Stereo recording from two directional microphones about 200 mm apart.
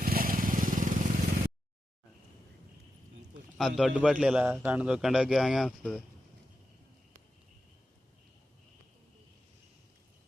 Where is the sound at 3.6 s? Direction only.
Centre (ahead or behind).